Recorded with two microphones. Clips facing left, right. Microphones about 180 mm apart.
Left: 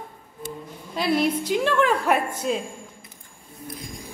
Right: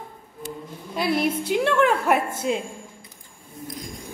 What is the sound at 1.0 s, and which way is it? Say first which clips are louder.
Speech: left 1 dB; 60° right (ahead or behind).